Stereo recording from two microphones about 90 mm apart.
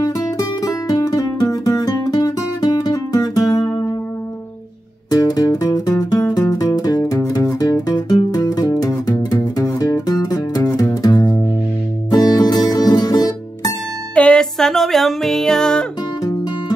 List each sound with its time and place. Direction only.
0.0 s music: 45° left (ahead or behind)
5.1 s music: 45° left (ahead or behind)
14.1 s music: 10° left (ahead or behind)